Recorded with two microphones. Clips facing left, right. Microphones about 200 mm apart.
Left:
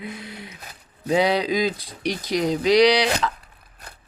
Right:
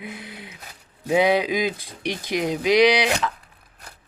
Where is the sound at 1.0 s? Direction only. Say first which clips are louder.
Right 1 dB; 5° right (ahead or behind).